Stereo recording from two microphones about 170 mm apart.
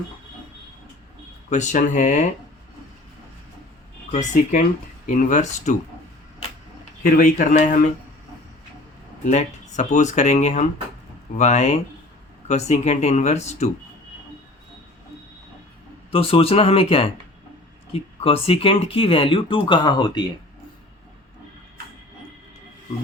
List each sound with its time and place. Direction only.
1.5 s speech: 45° left (ahead or behind)
4.1 s speech: 45° left (ahead or behind)
7.0 s speech: 50° left (ahead or behind)
9.2 s speech: 45° left (ahead or behind)
16.1 s speech: 35° left (ahead or behind)